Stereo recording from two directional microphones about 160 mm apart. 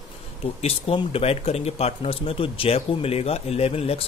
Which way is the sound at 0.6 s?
40° left (ahead or behind).